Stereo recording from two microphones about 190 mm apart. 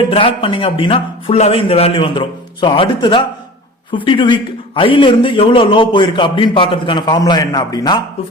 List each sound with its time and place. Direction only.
0.1 s a man's voice: 30° left (ahead or behind)